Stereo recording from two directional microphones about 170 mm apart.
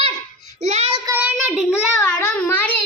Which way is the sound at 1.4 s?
Centre (ahead or behind).